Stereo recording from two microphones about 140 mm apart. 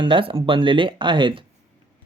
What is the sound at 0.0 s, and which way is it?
Speech, 35° right (ahead or behind).